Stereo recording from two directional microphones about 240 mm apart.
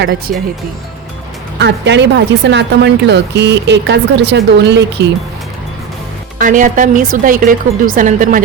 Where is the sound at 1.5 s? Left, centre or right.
Right.